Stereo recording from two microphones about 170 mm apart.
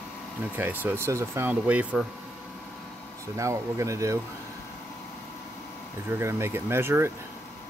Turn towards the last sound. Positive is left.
turn(degrees=-15)  # may be behind; listen again after turning